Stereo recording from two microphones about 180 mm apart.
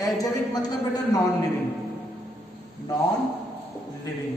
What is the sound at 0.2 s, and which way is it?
A woman's voice, 20° left (ahead or behind).